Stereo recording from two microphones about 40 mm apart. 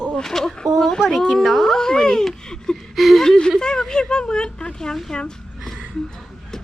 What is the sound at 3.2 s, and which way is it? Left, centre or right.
A child's voice, centre.